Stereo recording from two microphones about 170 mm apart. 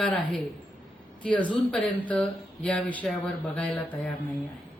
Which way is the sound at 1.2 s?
5° left (ahead or behind).